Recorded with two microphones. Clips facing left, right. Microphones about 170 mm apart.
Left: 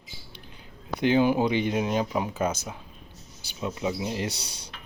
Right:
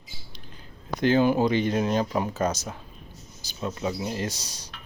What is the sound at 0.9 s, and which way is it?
Speech, 15° left (ahead or behind).